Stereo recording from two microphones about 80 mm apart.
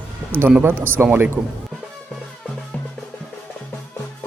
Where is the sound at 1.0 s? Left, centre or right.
Right.